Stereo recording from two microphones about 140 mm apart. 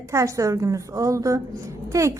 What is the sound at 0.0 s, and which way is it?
A woman's voice, 20° right (ahead or behind).